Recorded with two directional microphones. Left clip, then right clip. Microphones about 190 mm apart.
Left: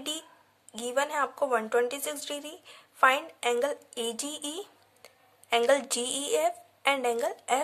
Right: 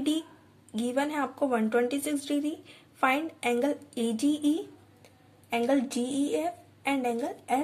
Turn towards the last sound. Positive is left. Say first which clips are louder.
# left 2 dB
turn(degrees=25)  # may be behind; listen again after turning